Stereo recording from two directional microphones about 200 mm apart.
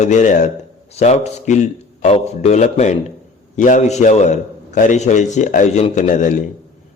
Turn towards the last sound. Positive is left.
turn(degrees=40)  # may be behind; listen again after turning